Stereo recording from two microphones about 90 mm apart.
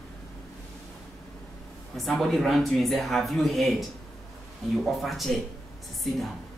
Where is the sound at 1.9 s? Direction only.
Centre (ahead or behind).